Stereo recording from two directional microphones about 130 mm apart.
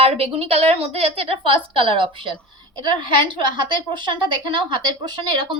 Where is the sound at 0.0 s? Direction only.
50° right (ahead or behind).